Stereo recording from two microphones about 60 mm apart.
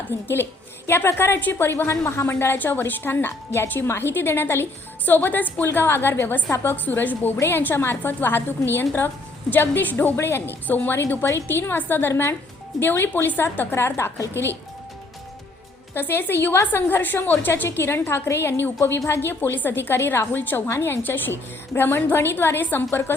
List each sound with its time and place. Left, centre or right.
0.9 s a woman's voice: left
1.9 s a woman's voice: left
2.2 s a woman's voice: left
6.8 s a woman's voice: left
10.2 s a woman's voice: left
10.7 s a woman's voice: left
16.0 s a woman's voice: left
20.7 s a woman's voice: left